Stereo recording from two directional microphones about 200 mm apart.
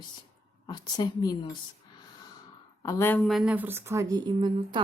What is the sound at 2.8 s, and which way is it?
Speech, 15° left (ahead or behind).